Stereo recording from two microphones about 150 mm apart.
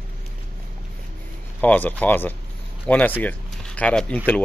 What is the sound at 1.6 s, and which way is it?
Speech, 10° left (ahead or behind).